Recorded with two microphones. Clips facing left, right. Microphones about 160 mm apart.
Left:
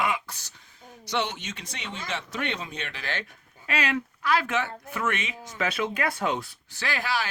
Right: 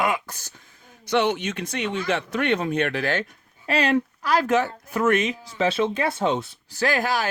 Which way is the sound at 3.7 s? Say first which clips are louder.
Right 7 dB; 35° right (ahead or behind).